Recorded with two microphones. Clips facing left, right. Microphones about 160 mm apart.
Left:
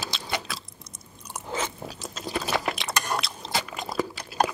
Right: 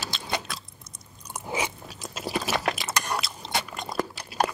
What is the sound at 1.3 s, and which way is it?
Biting, 10° right (ahead or behind).